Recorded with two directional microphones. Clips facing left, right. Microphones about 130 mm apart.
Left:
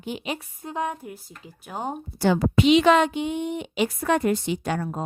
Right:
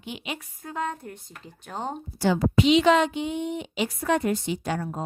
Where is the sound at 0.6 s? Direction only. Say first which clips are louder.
Left 2 dB; 15° left (ahead or behind).